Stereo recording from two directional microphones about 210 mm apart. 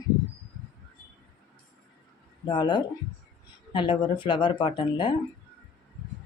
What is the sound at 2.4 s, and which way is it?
Speech, 20° left (ahead or behind).